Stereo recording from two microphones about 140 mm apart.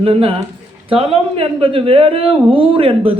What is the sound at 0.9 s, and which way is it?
Speech, 40° right (ahead or behind).